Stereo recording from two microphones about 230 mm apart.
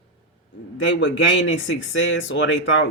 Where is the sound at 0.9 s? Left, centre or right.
Left.